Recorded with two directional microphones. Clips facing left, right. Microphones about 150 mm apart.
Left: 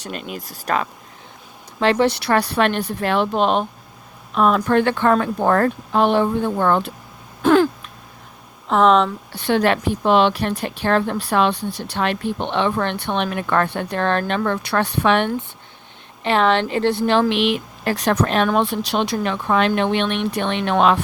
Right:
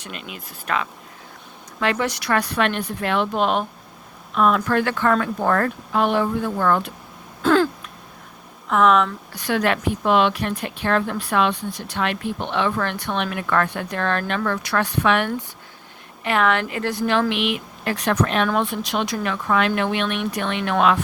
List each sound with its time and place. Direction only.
0.0 s a woman's voice: 40° left (ahead or behind)
7.4 s a sound: 15° left (ahead or behind)
8.6 s a woman's voice: 30° left (ahead or behind)